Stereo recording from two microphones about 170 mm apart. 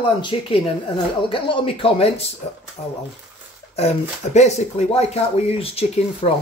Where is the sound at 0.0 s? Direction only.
30° left (ahead or behind).